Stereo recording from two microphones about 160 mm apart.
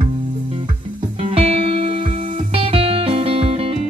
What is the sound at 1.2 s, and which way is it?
Music, 35° right (ahead or behind).